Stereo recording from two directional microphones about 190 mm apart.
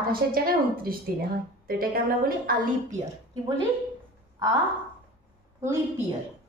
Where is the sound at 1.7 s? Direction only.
50° right (ahead or behind).